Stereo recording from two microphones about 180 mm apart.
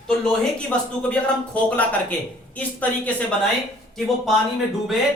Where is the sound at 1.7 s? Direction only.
10° left (ahead or behind).